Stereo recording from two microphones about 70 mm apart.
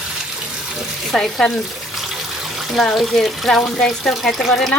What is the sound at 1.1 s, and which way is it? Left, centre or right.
Speech, centre.